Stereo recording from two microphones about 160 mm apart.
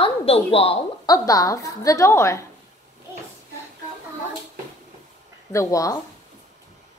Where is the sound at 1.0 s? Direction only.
20° left (ahead or behind).